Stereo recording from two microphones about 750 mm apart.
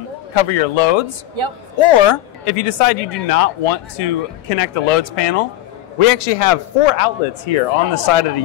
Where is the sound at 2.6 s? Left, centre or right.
Left.